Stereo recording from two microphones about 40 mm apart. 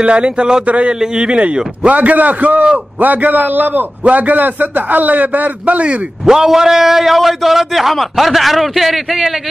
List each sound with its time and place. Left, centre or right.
0.0 s a man's voice: right
0.7 s a man's voice: right
0.9 s a man's voice: right
1.8 s a man's voice: right
3.0 s a man's voice: right
4.0 s a man's voice: right
6.2 s a man's voice: centre